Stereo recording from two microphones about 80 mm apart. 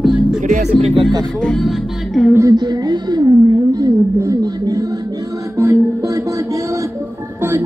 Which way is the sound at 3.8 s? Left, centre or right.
Right.